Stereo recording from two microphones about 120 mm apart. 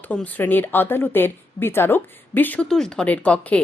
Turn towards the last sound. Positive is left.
turn(degrees=10)  # may be behind; listen again after turning